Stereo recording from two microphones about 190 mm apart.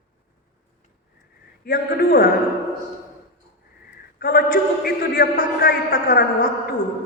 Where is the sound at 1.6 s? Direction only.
50° left (ahead or behind).